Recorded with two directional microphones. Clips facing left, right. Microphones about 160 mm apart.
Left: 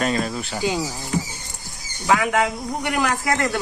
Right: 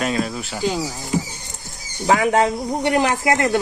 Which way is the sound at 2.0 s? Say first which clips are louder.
Right 3 dB; 35° right (ahead or behind).